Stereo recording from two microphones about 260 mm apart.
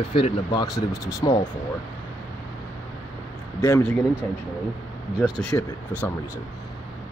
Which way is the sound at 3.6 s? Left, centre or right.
Centre.